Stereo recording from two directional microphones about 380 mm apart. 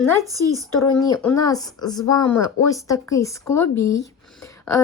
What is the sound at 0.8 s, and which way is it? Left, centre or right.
Speech, centre.